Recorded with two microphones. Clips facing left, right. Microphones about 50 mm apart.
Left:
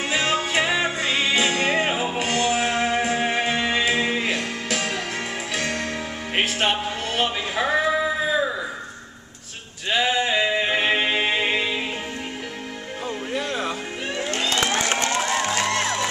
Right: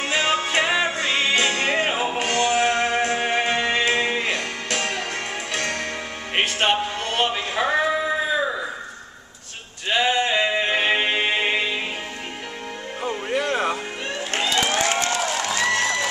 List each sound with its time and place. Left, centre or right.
0.0 s music: centre
1.8 s music: centre
2.1 s music: centre
9.8 s music: centre
13.4 s music: right
14.9 s music: left